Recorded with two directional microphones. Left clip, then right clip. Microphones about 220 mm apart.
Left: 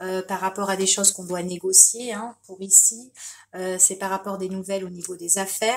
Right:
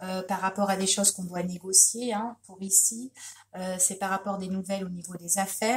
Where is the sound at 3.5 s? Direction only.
45° left (ahead or behind).